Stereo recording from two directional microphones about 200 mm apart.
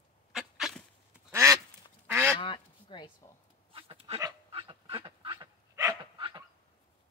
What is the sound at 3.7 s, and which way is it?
Dog, 30° right (ahead or behind).